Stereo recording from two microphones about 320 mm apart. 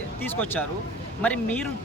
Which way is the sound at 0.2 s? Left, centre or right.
Centre.